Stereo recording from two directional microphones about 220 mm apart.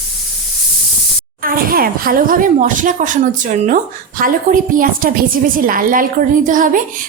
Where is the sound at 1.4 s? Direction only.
40° right (ahead or behind).